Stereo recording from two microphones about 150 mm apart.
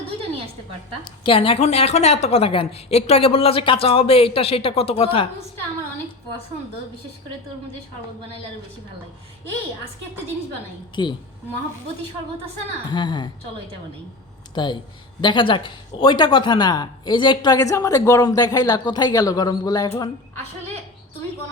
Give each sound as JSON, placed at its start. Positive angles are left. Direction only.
{"t": 1.2, "sound": "a woman's voice", "side_deg": 35}
{"t": 11.0, "sound": "a woman's voice", "side_deg": 30}
{"t": 12.9, "sound": "a woman's voice", "side_deg": 30}
{"t": 14.5, "sound": "speech", "side_deg": 30}